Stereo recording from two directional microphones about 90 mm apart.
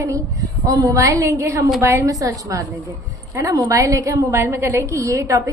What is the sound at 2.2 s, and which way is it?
A woman's voice, 40° right (ahead or behind).